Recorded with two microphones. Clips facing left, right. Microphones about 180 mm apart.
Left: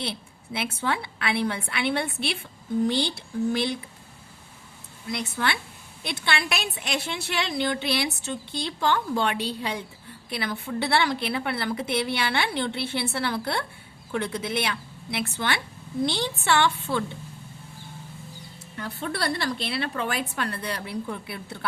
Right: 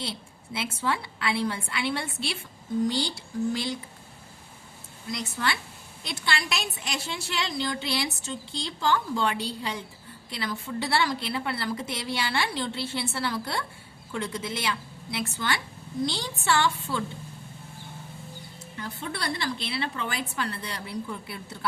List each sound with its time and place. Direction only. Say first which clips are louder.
0.0 s a woman's voice: left 3 dB; 60° left (ahead or behind)
5.1 s a woman's voice: left 2 dB; 60° left (ahead or behind)
18.8 s a woman's voice: left 4 dB; 60° left (ahead or behind)